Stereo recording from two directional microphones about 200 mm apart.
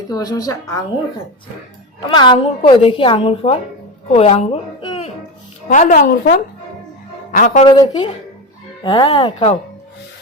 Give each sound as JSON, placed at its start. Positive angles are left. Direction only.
{"t": 0.1, "sound": "a woman's voice", "side_deg": 20}
{"t": 2.0, "sound": "a woman's voice", "side_deg": 25}
{"t": 5.6, "sound": "a man's voice", "side_deg": 40}
{"t": 7.7, "sound": "a woman's voice", "side_deg": 25}